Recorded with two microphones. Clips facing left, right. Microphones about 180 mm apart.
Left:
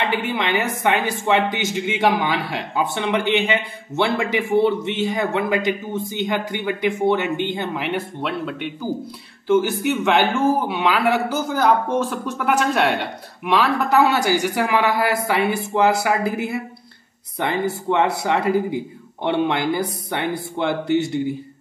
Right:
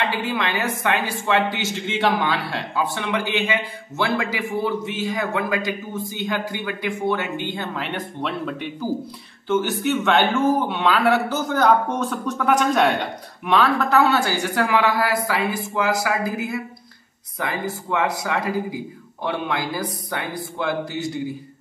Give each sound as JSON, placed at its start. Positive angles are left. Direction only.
{"t": 0.1, "sound": "a man's voice", "side_deg": 20}